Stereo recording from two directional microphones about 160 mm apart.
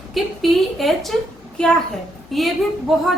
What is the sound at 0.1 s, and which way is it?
A woman's voice, centre (ahead or behind).